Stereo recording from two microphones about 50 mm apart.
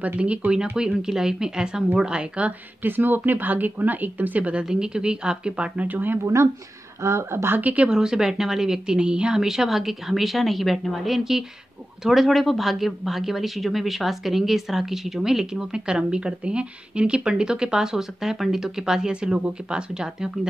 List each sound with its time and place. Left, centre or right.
0.0 s a woman's voice: right
0.7 s a woman's voice: centre
2.8 s speech: right
4.6 s speech: centre
5.9 s speech: right
6.2 s speech: right
7.6 s a woman's voice: right
7.9 s speech: centre